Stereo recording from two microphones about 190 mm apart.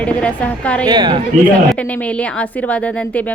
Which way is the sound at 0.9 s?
20° right (ahead or behind).